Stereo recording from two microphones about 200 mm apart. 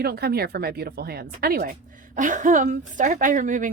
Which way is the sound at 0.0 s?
50° right (ahead or behind).